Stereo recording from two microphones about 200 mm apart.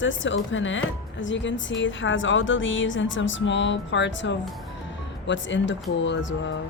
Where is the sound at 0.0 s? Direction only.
70° left (ahead or behind).